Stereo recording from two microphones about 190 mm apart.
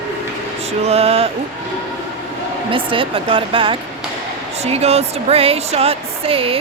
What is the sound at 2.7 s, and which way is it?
Speech, 25° right (ahead or behind).